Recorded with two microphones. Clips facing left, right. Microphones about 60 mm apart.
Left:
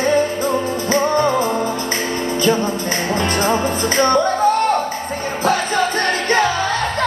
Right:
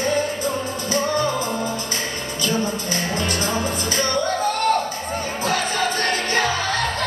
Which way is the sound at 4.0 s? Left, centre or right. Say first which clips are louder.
Left 9 dB; left.